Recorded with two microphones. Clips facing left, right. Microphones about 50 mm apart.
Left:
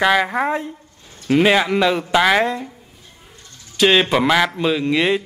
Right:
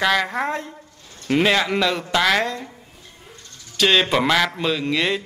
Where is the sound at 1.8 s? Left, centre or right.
Centre.